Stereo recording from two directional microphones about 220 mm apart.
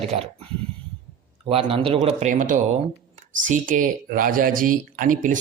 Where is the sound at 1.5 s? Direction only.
25° right (ahead or behind).